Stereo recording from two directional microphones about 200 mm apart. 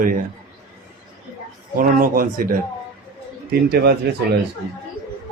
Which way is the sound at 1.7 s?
45° right (ahead or behind).